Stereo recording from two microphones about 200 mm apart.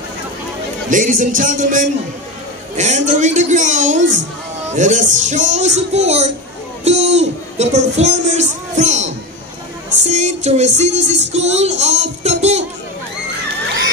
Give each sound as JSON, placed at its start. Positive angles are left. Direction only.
{"t": 0.8, "sound": "a man's voice", "side_deg": -40}